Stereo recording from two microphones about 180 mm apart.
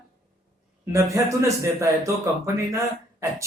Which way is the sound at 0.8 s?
15° right (ahead or behind).